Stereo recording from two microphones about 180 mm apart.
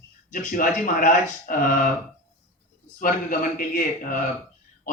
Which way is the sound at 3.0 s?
50° left (ahead or behind).